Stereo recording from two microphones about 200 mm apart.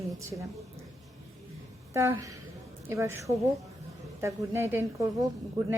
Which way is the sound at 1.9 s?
15° right (ahead or behind).